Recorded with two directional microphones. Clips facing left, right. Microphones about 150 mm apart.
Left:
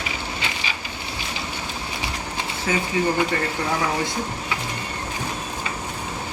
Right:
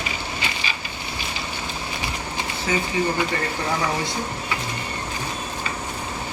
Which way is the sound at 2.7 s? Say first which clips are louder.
Even; 5° left (ahead or behind).